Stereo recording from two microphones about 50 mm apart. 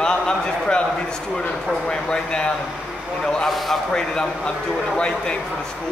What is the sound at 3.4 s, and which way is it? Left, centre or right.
Speech, centre.